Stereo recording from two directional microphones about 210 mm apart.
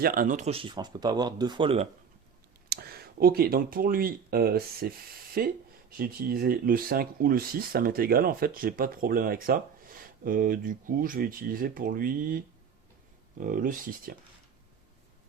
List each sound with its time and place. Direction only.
0.0 s speech: 40° right (ahead or behind); by 1.9 s 25° right (ahead or behind)
2.6 s speech: 45° right (ahead or behind)
13.4 s speech: 40° right (ahead or behind)